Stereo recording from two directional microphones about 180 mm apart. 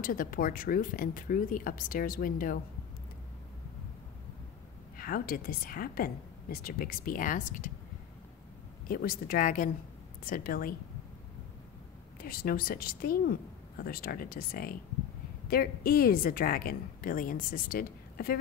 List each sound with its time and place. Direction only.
0.0 s a woman's voice: 50° left (ahead or behind)
4.9 s a woman's voice: 55° left (ahead or behind)
8.8 s a woman's voice: 55° left (ahead or behind)
12.2 s a woman's voice: 55° left (ahead or behind)